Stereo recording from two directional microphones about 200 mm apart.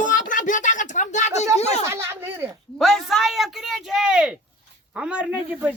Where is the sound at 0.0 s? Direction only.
40° left (ahead or behind).